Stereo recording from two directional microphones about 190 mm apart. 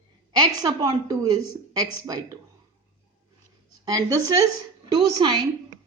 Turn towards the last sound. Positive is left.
turn(degrees=-25)  # may be behind; listen again after turning